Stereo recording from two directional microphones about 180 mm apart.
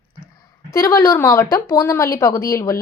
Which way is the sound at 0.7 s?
15° left (ahead or behind).